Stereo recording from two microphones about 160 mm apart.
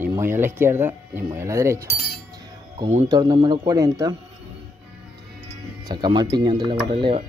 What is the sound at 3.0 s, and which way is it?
Speech, 25° right (ahead or behind).